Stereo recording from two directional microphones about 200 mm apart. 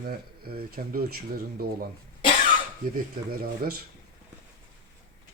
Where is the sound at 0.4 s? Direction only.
50° right (ahead or behind).